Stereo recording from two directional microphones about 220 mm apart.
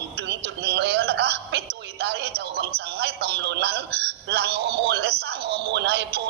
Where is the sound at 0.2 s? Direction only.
50° right (ahead or behind).